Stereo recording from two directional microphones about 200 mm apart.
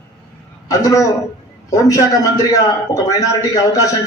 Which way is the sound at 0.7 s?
15° left (ahead or behind).